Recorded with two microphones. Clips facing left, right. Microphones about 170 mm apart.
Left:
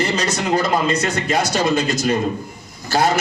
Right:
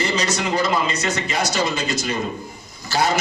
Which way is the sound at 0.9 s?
55° left (ahead or behind).